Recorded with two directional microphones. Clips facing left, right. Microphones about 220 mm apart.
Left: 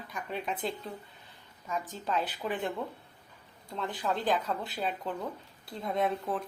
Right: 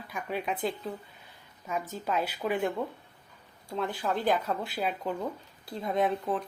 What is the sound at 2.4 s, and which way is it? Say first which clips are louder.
Speech: right 7 dB; 5° right (ahead or behind).